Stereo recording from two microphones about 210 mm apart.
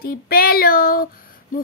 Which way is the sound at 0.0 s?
45° left (ahead or behind).